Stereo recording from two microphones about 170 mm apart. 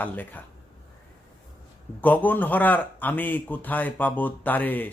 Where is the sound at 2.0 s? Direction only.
10° left (ahead or behind).